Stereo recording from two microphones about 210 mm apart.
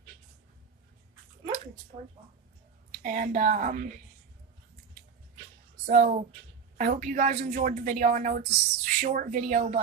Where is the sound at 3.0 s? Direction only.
40° right (ahead or behind).